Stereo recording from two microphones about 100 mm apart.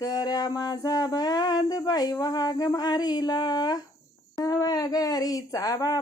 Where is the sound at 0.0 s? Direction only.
40° left (ahead or behind).